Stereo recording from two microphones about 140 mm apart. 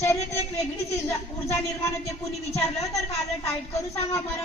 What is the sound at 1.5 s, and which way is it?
A woman's voice, 20° left (ahead or behind).